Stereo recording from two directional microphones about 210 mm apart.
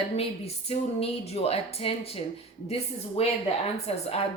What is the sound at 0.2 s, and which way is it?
A woman's voice, 30° left (ahead or behind).